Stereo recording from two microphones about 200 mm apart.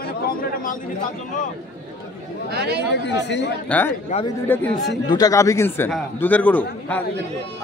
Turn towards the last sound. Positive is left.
turn(degrees=10)  # may be behind; listen again after turning